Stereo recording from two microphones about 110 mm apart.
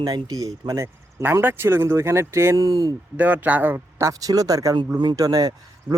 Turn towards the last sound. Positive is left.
turn(degrees=-30)  # may be behind; listen again after turning